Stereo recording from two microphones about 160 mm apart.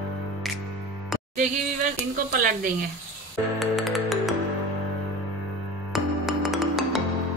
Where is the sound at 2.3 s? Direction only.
60° right (ahead or behind).